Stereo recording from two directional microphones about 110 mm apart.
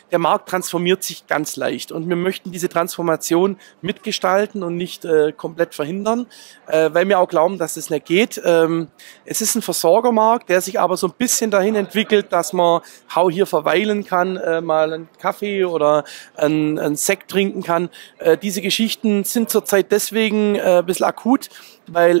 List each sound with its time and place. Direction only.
0.1 s speech: 20° right (ahead or behind)